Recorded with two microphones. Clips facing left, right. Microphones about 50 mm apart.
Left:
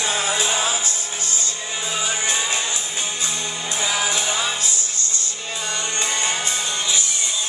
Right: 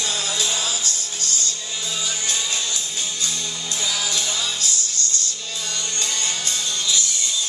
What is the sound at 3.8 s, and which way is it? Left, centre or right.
Music, left.